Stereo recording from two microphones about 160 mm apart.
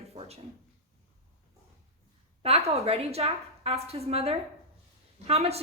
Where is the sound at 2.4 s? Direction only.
40° right (ahead or behind).